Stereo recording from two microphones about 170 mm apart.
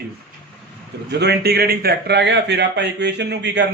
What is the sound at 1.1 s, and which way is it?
A man's voice, 80° right.